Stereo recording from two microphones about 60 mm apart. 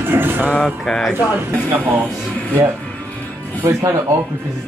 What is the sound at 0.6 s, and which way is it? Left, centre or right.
Sanding, centre.